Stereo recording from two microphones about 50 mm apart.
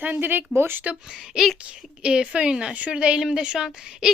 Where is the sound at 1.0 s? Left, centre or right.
Centre.